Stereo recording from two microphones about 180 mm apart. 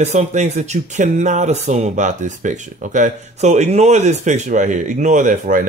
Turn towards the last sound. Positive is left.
turn(degrees=-45)  # may be behind; listen again after turning